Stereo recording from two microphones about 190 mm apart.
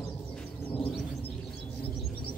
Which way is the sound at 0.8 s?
Centre (ahead or behind).